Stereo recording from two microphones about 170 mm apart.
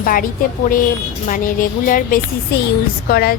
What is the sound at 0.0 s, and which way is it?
Speech, 55° left (ahead or behind).